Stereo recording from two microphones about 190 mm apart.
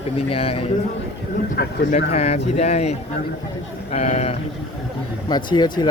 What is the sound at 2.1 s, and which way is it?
A man's voice, 35° left (ahead or behind).